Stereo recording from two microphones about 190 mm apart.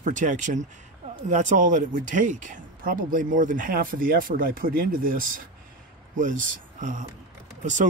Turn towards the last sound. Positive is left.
turn(degrees=-40)  # may be behind; listen again after turning